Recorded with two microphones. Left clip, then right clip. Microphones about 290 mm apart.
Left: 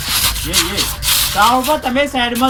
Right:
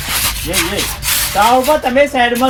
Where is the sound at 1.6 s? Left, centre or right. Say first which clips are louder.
Right 4 dB; centre.